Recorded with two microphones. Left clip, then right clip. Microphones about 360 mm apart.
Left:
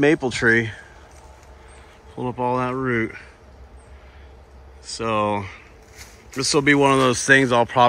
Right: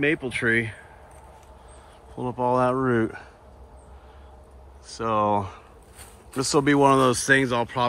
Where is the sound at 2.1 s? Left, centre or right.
Centre.